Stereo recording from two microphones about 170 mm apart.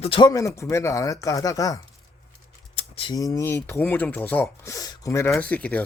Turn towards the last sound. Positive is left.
turn(degrees=10)  # may be behind; listen again after turning